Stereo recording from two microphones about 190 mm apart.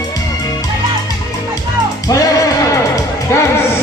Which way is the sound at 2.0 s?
20° left (ahead or behind).